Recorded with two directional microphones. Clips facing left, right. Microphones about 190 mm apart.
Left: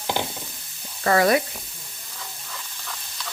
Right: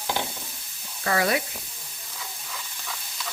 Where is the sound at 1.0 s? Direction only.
45° left (ahead or behind).